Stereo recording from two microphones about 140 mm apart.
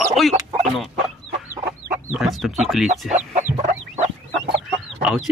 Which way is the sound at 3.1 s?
65° right (ahead or behind).